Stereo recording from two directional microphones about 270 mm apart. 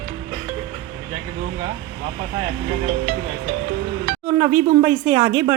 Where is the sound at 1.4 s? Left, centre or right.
Right.